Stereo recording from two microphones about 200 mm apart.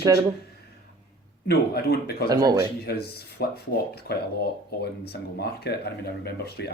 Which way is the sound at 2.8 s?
50° left (ahead or behind).